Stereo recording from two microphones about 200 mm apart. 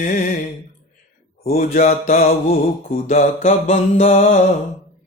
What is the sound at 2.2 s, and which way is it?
Mantra, 45° left (ahead or behind).